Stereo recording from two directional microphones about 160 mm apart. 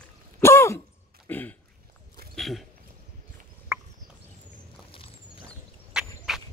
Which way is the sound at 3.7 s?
15° right (ahead or behind).